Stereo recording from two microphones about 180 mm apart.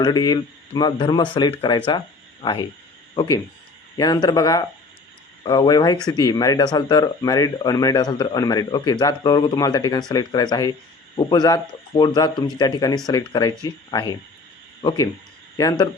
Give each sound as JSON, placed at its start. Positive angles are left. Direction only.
{"t": 0.0, "sound": "speech", "side_deg": 25}